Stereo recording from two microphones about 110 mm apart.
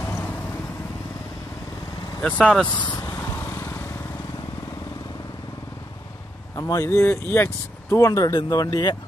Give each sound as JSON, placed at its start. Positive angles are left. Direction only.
{"t": 0.0, "sound": "vehicle", "side_deg": 15}
{"t": 2.2, "sound": "speech", "side_deg": 10}
{"t": 2.7, "sound": "speech", "side_deg": 40}
{"t": 3.3, "sound": "lawn mower", "side_deg": 25}
{"t": 6.5, "sound": "speech", "side_deg": 30}